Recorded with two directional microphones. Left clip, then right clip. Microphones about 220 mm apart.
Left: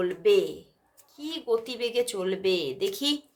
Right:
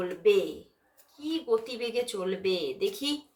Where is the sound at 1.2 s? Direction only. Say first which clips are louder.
Even; 50° left (ahead or behind).